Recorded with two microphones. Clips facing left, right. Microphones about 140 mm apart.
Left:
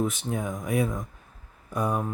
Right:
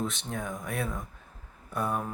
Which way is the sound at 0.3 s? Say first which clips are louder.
Left 6 dB; 20° left (ahead or behind).